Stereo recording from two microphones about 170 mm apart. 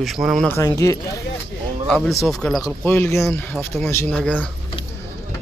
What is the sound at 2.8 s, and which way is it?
Speech, 15° left (ahead or behind).